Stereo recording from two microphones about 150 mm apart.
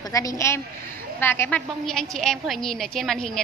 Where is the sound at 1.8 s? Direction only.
Centre (ahead or behind).